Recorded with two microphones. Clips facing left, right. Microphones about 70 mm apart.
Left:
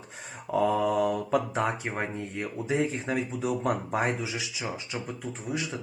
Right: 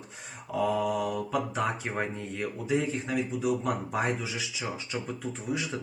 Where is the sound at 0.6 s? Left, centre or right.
Left.